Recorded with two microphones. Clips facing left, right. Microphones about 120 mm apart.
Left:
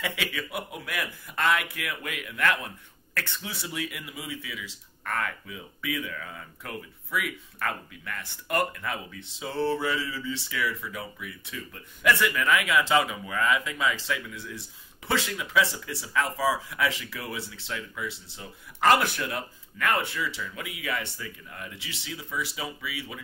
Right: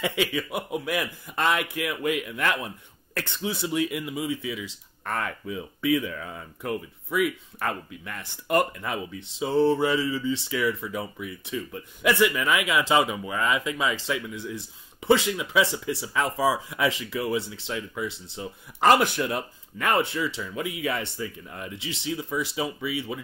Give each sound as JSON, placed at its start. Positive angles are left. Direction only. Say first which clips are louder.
{"t": 0.0, "sound": "speech", "louder": "right 6 dB", "side_deg": -25}